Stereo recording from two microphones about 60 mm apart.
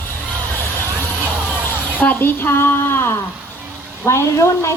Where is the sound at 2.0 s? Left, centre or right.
Left.